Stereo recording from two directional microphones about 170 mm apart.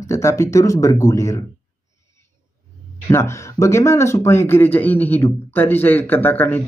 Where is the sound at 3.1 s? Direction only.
15° left (ahead or behind).